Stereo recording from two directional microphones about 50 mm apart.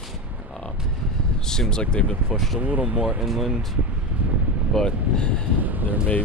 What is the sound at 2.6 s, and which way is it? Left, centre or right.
Speech, right.